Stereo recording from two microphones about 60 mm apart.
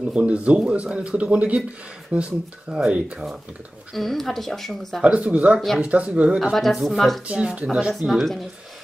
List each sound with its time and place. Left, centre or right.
0.1 s speech: centre
3.9 s speech: centre
5.0 s speech: right
6.5 s speech: centre
7.2 s speech: centre
7.9 s speech: centre